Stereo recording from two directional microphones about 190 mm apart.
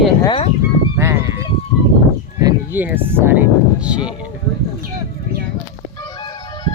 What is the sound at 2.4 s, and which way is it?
Speech, 10° right (ahead or behind).